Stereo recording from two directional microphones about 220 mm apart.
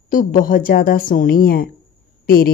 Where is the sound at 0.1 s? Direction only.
40° left (ahead or behind).